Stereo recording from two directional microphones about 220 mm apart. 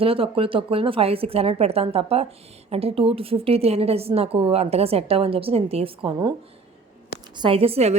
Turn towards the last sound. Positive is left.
turn(degrees=-25)  # may be behind; listen again after turning